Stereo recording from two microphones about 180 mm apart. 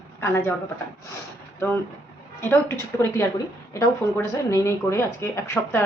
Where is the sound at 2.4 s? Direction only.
15° left (ahead or behind).